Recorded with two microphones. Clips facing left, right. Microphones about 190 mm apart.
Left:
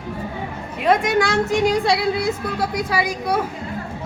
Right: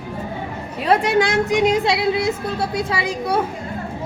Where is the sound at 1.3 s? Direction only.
15° right (ahead or behind).